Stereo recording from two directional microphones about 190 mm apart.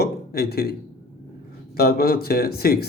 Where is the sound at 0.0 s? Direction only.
55° left (ahead or behind).